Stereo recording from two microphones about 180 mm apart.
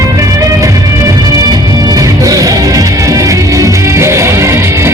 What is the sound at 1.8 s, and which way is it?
Music, 20° right (ahead or behind).